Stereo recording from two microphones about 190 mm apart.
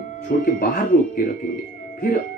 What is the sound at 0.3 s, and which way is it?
Speech, 50° left (ahead or behind).